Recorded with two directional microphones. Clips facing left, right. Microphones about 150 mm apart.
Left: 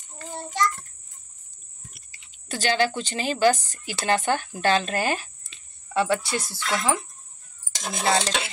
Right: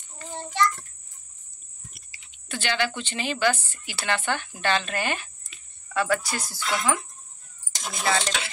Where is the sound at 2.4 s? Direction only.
35° left (ahead or behind).